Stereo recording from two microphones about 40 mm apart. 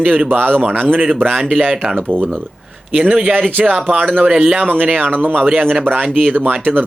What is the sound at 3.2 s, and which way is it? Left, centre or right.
Speech, right.